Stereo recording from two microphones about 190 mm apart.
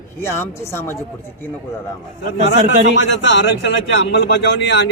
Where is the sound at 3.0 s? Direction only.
70° left (ahead or behind).